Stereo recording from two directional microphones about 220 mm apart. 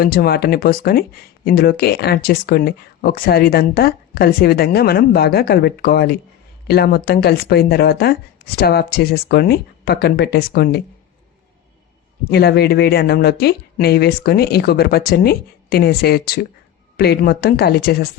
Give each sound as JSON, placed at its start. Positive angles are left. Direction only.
{"t": 0.0, "sound": "speech", "side_deg": 40}
{"t": 12.3, "sound": "speech", "side_deg": 45}